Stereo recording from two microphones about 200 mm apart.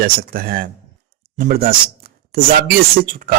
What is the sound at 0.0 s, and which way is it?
Speech, 45° right (ahead or behind).